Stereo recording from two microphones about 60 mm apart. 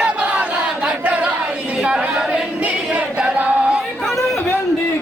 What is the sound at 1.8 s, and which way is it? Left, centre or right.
A capella, centre.